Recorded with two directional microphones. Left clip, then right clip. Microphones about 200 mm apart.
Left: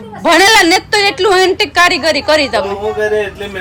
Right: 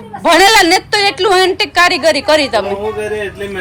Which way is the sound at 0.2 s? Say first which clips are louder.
Even; 10° left (ahead or behind).